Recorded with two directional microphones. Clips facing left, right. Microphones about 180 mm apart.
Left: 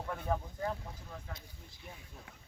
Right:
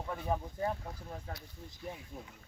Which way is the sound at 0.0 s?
5° right (ahead or behind).